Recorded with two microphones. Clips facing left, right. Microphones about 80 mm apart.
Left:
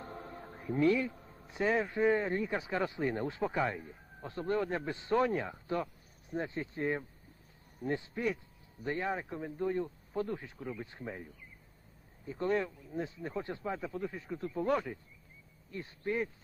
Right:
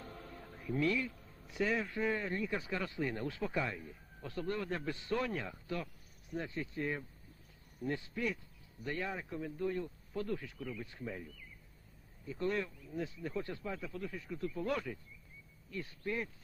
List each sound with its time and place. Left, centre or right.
0.0 s music: left
2.3 s speech: left
2.6 s speech: left